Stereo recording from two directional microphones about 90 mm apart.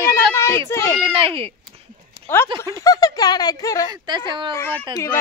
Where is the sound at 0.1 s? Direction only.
30° left (ahead or behind).